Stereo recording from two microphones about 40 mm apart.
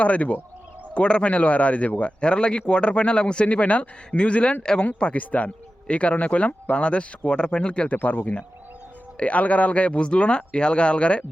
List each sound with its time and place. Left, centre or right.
0.0 s speech: left
1.3 s speech: left
5.1 s speech: left
7.9 s speech: left